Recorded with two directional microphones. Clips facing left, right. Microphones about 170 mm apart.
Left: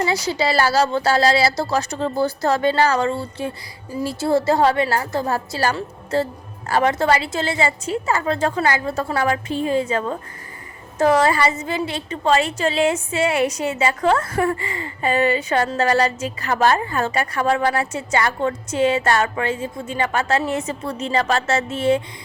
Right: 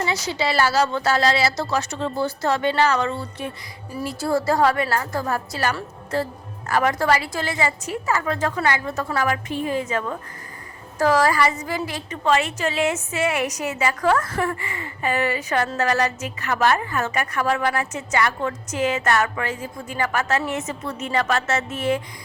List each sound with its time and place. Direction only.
0.0 s a woman's voice: 35° left (ahead or behind)